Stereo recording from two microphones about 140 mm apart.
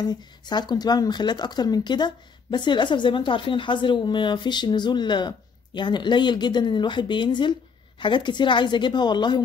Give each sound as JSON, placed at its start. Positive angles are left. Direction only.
{"t": 0.0, "sound": "speech", "side_deg": 30}